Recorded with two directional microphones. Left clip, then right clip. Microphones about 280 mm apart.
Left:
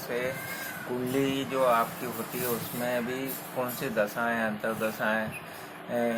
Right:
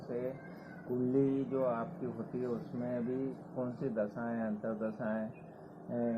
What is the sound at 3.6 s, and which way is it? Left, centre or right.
Speech, centre.